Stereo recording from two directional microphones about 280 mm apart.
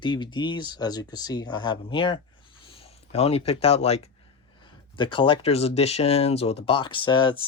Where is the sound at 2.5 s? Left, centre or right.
Centre.